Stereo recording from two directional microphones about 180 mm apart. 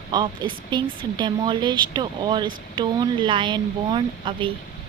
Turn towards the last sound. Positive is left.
turn(degrees=-25)  # may be behind; listen again after turning